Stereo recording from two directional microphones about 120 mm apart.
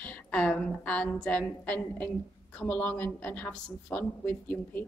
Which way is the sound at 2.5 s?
15° left (ahead or behind).